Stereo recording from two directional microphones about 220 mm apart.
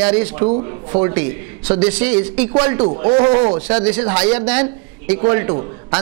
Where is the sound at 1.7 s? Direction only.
10° right (ahead or behind).